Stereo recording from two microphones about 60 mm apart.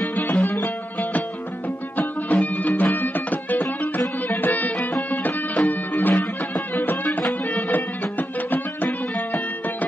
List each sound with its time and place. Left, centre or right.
0.0 s music: left
2.0 s music: left
5.7 s music: left
7.5 s music: left